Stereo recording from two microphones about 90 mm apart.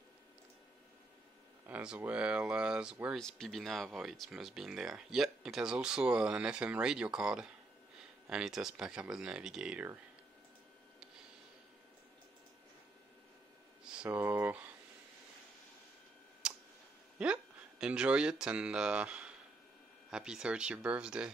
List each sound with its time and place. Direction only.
1.7 s speech: 15° right (ahead or behind)
3.2 s speech: 5° left (ahead or behind); by 9.8 s 10° right (ahead or behind)
14.1 s speech: 20° right (ahead or behind)
16.4 s tick: 10° right (ahead or behind)
17.2 s speech: 10° right (ahead or behind)